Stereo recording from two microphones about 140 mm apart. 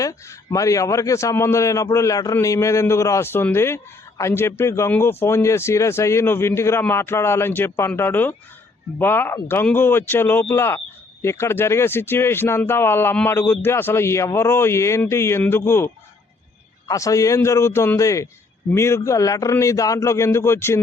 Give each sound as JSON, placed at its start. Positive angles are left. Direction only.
{"t": 0.0, "sound": "a man's voice", "side_deg": 20}
{"t": 16.9, "sound": "a man's voice", "side_deg": 25}